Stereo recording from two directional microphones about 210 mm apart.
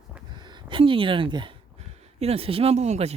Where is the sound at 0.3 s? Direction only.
20° right (ahead or behind).